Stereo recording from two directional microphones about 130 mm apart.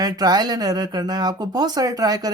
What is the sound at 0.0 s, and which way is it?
Speech, 30° right (ahead or behind).